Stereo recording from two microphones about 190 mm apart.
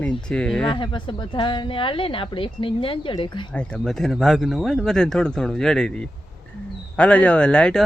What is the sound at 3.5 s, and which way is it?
Speech, 5° left (ahead or behind).